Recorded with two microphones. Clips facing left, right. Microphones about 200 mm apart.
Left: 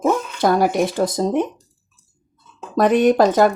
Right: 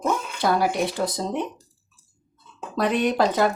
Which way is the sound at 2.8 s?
50° left (ahead or behind).